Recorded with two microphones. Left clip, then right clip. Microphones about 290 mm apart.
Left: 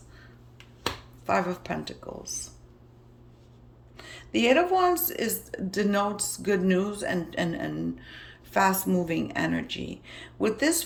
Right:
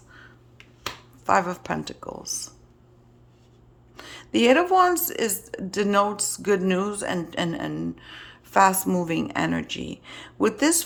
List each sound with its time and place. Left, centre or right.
0.1 s finger snapping: centre
1.2 s speech: centre
3.9 s speech: centre